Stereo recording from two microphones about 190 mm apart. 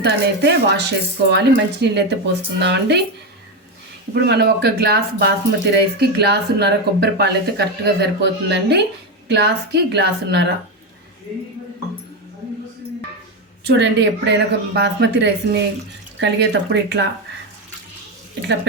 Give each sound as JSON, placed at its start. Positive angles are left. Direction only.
{"t": 0.0, "sound": "speech", "side_deg": -60}
{"t": 4.1, "sound": "speech", "side_deg": -60}
{"t": 13.7, "sound": "speech", "side_deg": -65}